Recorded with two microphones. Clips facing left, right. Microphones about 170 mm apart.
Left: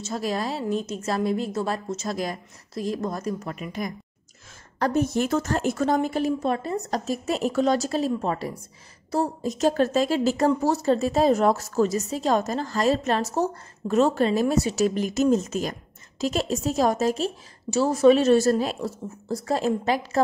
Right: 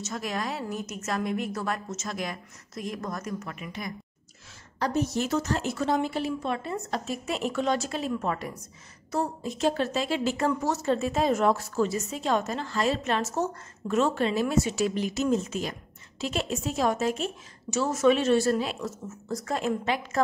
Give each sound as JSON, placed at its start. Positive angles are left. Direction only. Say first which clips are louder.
{"t": 0.0, "sound": "a woman's voice", "louder": "left 5 dB", "side_deg": 30}
{"t": 4.7, "sound": "a woman's voice", "louder": "left 4 dB", "side_deg": 50}